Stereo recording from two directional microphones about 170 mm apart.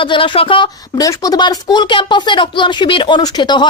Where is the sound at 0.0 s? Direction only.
30° left (ahead or behind).